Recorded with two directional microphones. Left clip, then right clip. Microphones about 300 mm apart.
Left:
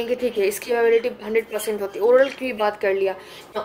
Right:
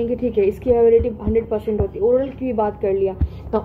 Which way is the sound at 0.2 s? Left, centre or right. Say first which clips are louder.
Right 3 dB; left.